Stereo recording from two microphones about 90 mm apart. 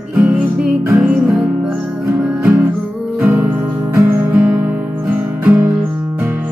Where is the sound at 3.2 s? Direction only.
20° right (ahead or behind).